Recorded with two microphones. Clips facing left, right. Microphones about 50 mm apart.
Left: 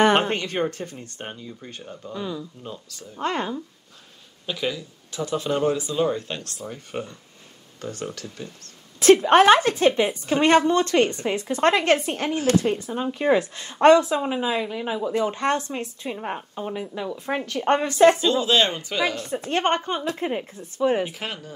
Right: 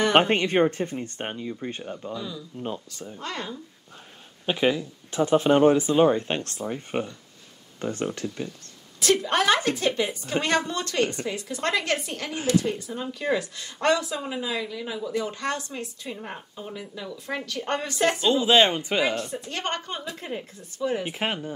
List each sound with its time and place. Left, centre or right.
0.1 s speech: right
2.1 s speech: left
2.6 s speech: right
3.2 s speech: left
4.5 s speech: right
9.0 s speech: left
18.2 s speech: centre
19.2 s speech: left
21.1 s speech: right